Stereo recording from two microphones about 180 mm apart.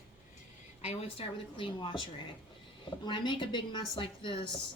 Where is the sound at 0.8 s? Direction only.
30° left (ahead or behind).